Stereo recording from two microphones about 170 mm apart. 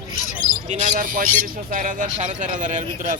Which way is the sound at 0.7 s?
45° right (ahead or behind).